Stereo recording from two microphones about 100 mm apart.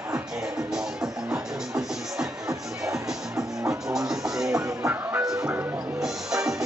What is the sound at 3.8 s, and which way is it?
Music, 5° right (ahead or behind).